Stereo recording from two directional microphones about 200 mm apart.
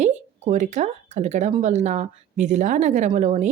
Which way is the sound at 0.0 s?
35° right (ahead or behind).